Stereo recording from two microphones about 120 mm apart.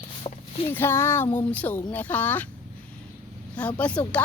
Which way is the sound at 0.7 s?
20° left (ahead or behind).